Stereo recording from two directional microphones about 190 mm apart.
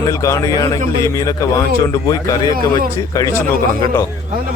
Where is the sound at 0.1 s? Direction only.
15° left (ahead or behind).